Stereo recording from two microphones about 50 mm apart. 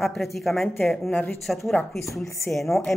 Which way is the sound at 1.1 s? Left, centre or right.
Left.